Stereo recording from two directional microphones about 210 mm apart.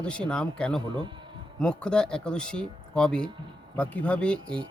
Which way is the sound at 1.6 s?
5° left (ahead or behind).